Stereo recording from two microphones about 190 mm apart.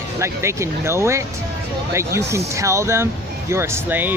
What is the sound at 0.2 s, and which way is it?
Speech, 15° right (ahead or behind).